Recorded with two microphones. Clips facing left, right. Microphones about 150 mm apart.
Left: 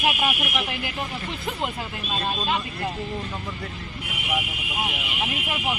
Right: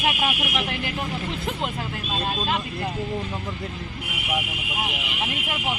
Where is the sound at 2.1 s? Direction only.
Centre (ahead or behind).